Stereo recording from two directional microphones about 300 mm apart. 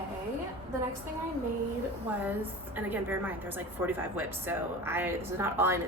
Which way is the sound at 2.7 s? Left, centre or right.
Centre.